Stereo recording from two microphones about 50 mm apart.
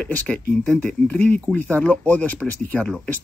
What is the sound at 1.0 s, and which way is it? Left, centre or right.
Speech, left.